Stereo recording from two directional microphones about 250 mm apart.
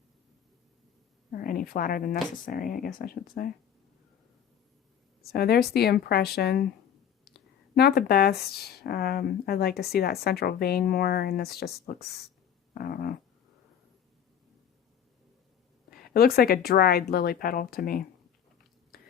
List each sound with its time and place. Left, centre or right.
1.3 s speech: left
5.3 s speech: left
16.0 s speech: left
18.9 s whispering: left